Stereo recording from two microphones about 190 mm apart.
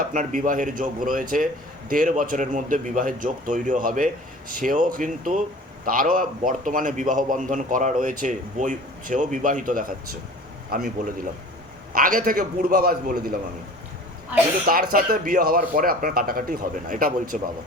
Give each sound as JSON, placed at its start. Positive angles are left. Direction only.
{"t": 0.0, "sound": "a man's voice", "side_deg": -40}
{"t": 14.7, "sound": "a man's voice", "side_deg": -50}